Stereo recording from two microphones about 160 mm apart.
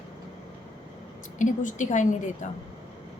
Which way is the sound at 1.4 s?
50° left (ahead or behind).